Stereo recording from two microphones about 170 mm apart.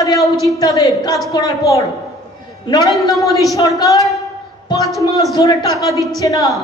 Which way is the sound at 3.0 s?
20° left (ahead or behind).